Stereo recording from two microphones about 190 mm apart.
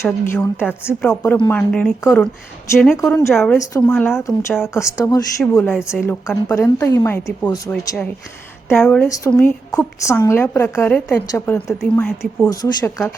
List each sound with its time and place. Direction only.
0.0 s a woman's voice: 10° left (ahead or behind)
2.7 s a woman's voice: centre (ahead or behind)
3.0 s a woman's voice: 15° left (ahead or behind)
8.7 s a woman's voice: 5° left (ahead or behind)